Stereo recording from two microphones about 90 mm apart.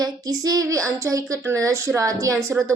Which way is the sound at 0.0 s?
40° right (ahead or behind).